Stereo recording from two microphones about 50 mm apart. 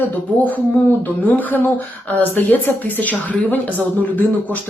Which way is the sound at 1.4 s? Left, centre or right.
Left.